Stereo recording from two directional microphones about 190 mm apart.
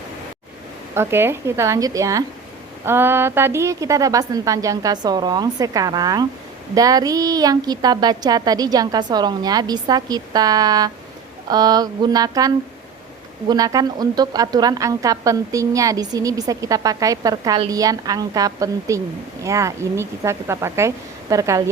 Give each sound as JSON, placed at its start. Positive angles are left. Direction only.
{"t": 0.9, "sound": "a woman's voice", "side_deg": -10}